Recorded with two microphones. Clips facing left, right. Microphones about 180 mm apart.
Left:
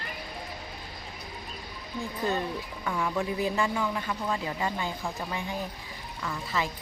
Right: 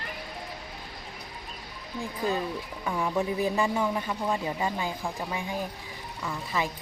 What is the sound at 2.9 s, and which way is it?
Speech, 20° right (ahead or behind).